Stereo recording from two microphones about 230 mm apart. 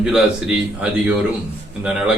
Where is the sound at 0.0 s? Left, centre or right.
Centre.